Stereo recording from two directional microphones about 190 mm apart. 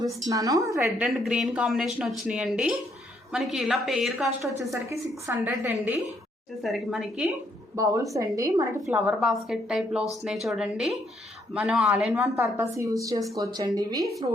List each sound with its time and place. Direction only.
0.3 s speech: 20° right (ahead or behind); by 4.3 s centre (ahead or behind)
4.9 s a woman's voice: 10° right (ahead or behind)
6.6 s speech: centre (ahead or behind)
7.8 s a woman's voice: 15° right (ahead or behind)
9.0 s speech: 5° right (ahead or behind)
12.4 s a woman's voice: 15° right (ahead or behind)